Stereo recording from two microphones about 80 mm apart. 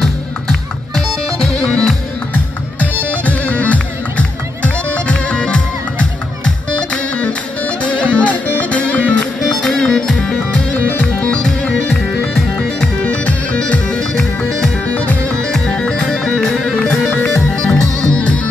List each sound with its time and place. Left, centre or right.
0.0 s music: centre
9.4 s music: centre